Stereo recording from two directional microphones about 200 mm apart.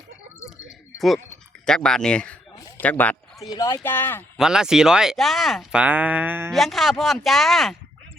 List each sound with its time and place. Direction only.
1.6 s speech: 5° left (ahead or behind)
2.6 s a sound: 10° left (ahead or behind)
3.5 s speech: 20° left (ahead or behind)
4.4 s speech: 5° right (ahead or behind)